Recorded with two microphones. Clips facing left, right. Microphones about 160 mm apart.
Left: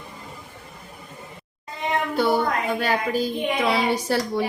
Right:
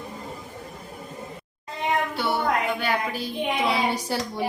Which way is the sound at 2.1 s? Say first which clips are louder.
Left 3 dB; 40° left (ahead or behind).